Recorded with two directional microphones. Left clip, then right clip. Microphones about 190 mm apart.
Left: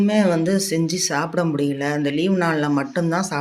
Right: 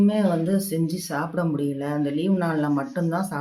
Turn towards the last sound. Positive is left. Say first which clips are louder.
# left 5 dB
turn(degrees=10)  # may be behind; listen again after turning